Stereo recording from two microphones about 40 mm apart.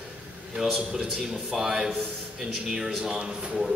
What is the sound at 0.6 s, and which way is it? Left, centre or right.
A man's voice, centre.